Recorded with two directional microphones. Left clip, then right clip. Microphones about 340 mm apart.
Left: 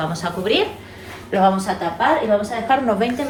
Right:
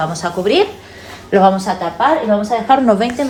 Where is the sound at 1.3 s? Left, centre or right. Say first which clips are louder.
Right 5 dB; right.